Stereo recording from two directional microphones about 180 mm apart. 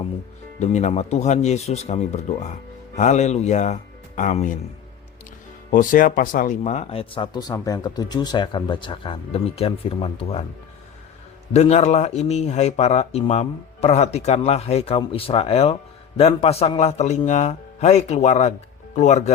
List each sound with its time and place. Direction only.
0.6 s speech: 40° left (ahead or behind)
5.7 s speech: 50° left (ahead or behind); by 10.4 s 30° left (ahead or behind)
11.5 s speech: 35° left (ahead or behind)